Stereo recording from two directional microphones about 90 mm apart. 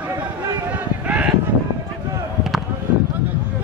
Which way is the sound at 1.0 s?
15° right (ahead or behind).